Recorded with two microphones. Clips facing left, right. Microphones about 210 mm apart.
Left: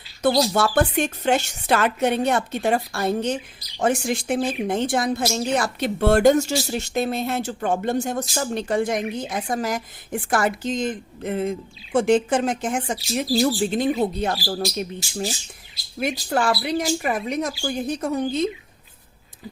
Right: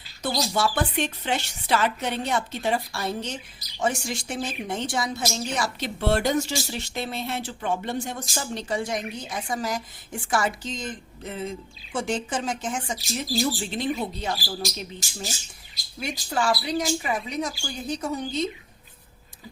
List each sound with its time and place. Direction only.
0.2 s a woman's voice: 50° left (ahead or behind)
13.1 s speech: 45° left (ahead or behind)
14.0 s a woman's voice: 60° left (ahead or behind)